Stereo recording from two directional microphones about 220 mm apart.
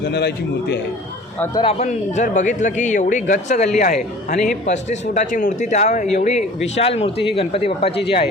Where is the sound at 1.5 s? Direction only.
25° left (ahead or behind).